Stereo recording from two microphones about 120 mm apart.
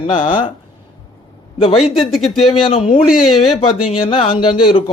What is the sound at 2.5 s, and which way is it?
Speech, 55° left (ahead or behind).